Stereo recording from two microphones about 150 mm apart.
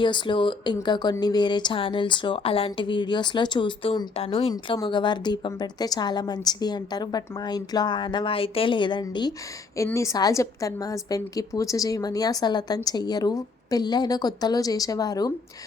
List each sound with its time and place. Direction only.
0.0 s speech: 30° left (ahead or behind)
9.7 s a woman's voice: 20° left (ahead or behind)